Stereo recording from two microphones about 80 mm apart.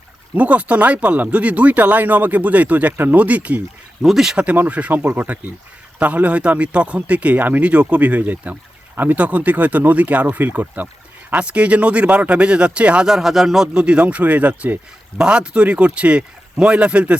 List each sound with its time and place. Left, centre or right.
0.3 s speech: centre
4.0 s speech: centre
4.4 s speech: centre